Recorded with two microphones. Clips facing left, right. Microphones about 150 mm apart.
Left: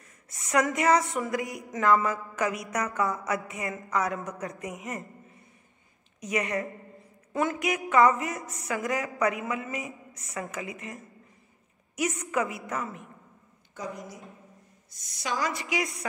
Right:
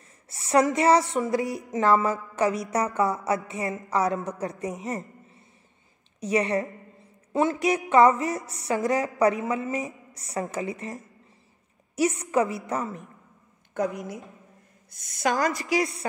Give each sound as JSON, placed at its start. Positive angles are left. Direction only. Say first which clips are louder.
{"t": 0.3, "sound": "a woman's voice", "louder": "right 5 dB", "side_deg": -30}
{"t": 15.0, "sound": "a woman's voice", "louder": "right 6 dB", "side_deg": -50}